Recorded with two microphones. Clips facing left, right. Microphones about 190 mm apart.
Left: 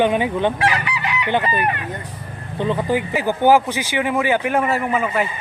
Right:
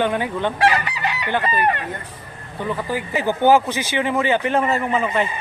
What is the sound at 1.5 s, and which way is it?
Speech, 30° right (ahead or behind).